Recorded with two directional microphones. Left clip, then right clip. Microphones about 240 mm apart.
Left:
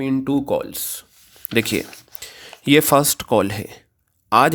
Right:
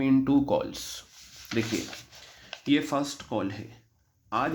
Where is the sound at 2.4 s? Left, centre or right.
Left.